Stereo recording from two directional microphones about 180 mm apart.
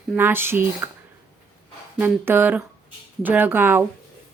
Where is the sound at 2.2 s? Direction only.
10° right (ahead or behind).